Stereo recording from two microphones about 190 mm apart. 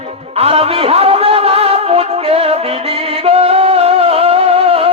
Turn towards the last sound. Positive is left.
turn(degrees=-30)  # may be behind; listen again after turning